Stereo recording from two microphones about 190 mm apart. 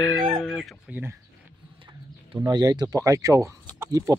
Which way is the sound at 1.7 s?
25° right (ahead or behind).